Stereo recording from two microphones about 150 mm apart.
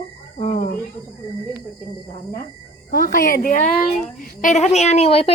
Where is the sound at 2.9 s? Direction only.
85° left; by 3.6 s 65° left (ahead or behind).